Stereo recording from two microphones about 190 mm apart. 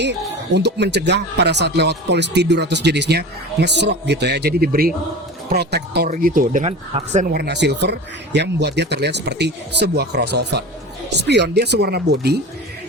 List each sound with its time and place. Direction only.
0.0 s speech: 65° right (ahead or behind)
6.1 s speech: 45° right (ahead or behind)
7.3 s speech: 60° right (ahead or behind)